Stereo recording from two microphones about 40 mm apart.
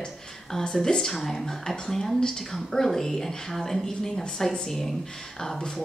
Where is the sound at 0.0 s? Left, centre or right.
Centre.